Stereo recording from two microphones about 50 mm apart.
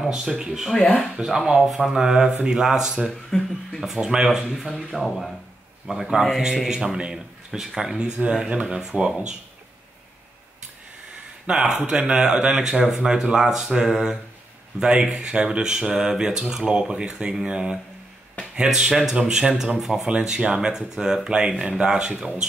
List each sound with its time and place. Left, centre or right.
0.0 s speech: centre
0.7 s speech: centre
1.1 s speech: centre
3.3 s speech: centre
3.8 s speech: centre
4.6 s speech: centre
8.0 s speech: centre
11.4 s speech: centre